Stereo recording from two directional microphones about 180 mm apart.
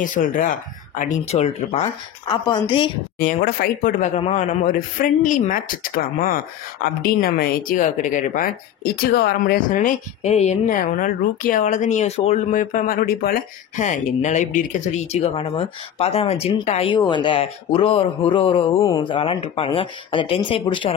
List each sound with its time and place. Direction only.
0.0 s speech: 45° left (ahead or behind)
2.2 s a woman's voice: 25° left (ahead or behind)
3.2 s speech: 50° left (ahead or behind); by 4.5 s 35° left (ahead or behind)
4.5 s speech: 50° left (ahead or behind); by 20.9 s 25° left (ahead or behind)